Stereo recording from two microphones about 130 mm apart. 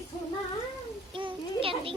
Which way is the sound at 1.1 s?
40° right (ahead or behind).